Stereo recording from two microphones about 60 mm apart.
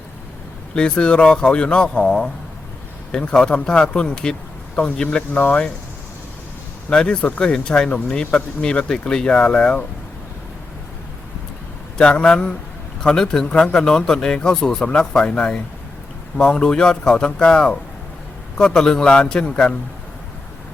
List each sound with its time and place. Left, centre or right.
0.8 s speech: centre
6.9 s speech: centre
7.2 s speech: left
7.4 s speech: centre
11.9 s speech: centre